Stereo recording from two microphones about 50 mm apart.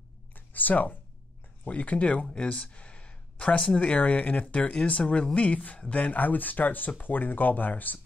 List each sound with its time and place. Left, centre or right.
0.3 s a sound: left
1.7 s speech: left
5.8 s speech: centre
6.0 s speech: left